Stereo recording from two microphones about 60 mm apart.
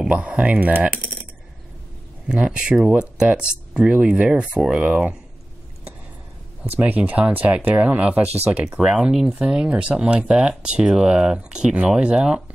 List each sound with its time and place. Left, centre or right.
0.0 s speech: centre
2.2 s speech: centre
6.8 s speech: right
8.6 s speech: centre